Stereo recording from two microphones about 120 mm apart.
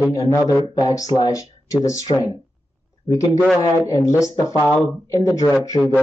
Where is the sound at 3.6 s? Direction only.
30° left (ahead or behind).